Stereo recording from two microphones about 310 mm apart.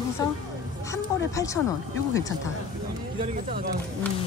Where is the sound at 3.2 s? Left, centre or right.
Right.